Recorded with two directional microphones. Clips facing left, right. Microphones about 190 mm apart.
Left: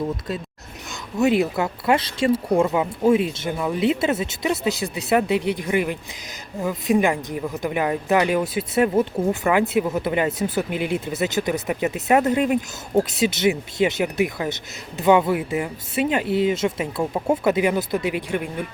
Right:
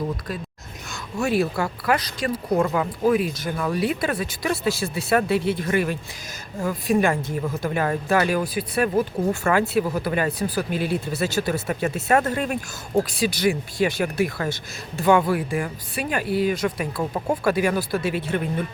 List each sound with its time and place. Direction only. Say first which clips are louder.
1.2 s speech: left 3 dB; 20° left (ahead or behind)
17.0 s speech: left 3 dB; 10° left (ahead or behind)
17.4 s speech: right 1 dB; 20° left (ahead or behind)